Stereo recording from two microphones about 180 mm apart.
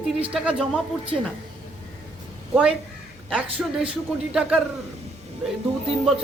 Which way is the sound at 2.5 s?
5° right (ahead or behind).